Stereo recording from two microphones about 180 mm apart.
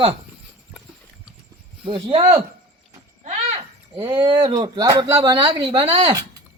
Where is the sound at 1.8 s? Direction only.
30° right (ahead or behind).